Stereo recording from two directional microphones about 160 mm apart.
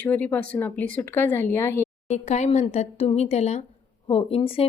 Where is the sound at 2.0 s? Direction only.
45° left (ahead or behind).